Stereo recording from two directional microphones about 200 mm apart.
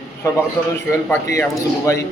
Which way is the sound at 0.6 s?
15° left (ahead or behind).